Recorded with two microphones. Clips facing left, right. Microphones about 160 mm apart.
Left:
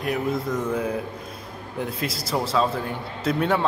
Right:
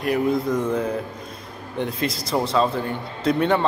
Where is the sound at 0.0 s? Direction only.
Centre (ahead or behind).